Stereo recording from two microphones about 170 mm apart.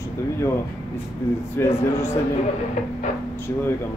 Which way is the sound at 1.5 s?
15° left (ahead or behind).